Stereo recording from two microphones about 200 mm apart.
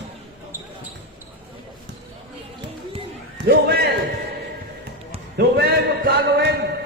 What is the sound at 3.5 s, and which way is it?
Speech, 50° right (ahead or behind).